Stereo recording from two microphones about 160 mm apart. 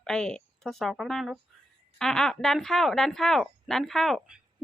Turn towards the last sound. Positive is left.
turn(degrees=0)  # may be behind; listen again after turning